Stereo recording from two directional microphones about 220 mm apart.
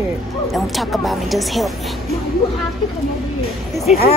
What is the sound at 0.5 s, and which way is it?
Speech, centre (ahead or behind).